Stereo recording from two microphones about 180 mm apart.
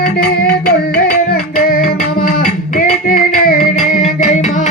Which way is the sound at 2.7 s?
50° left (ahead or behind).